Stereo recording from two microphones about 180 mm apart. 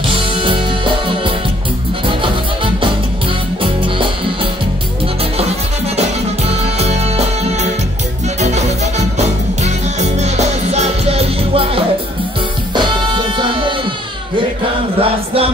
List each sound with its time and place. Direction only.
0.4 s music: 30° right (ahead or behind)
5.9 s music: 35° right (ahead or behind)
15.0 s chant: 30° right (ahead or behind)